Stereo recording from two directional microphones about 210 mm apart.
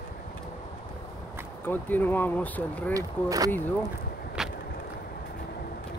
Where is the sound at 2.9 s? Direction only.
15° right (ahead or behind).